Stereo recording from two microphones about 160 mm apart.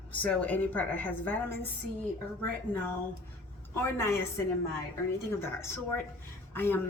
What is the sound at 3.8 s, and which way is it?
A woman's voice, 15° left (ahead or behind).